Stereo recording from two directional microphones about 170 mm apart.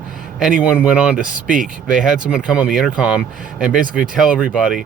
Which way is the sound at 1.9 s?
5° right (ahead or behind).